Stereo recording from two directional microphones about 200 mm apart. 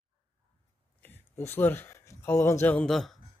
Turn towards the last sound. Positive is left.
turn(degrees=0)  # may be behind; listen again after turning